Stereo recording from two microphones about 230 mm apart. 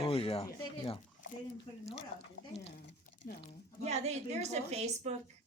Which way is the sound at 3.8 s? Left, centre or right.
Right.